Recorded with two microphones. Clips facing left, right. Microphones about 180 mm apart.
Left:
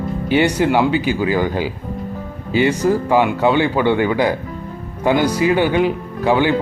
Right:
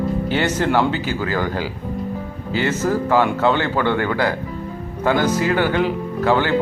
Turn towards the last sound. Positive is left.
turn(degrees=15)  # may be behind; listen again after turning